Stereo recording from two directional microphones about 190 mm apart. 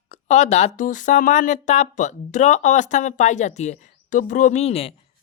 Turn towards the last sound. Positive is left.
turn(degrees=30)  # may be behind; listen again after turning